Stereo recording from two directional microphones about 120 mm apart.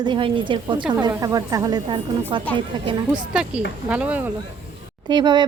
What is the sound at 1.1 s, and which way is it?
Speech, 30° right (ahead or behind).